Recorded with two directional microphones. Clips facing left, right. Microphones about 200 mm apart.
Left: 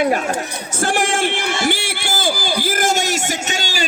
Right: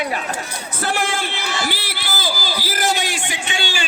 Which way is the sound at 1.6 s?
50° left (ahead or behind).